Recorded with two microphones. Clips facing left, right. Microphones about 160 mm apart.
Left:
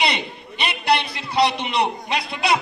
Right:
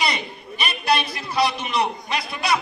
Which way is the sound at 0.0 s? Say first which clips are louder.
Left 2 dB; 25° left (ahead or behind).